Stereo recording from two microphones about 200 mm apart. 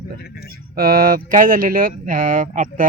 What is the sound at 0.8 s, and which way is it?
A man's voice, 50° right (ahead or behind).